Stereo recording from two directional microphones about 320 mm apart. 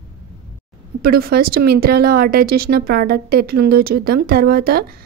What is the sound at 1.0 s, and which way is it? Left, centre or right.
Speech, right.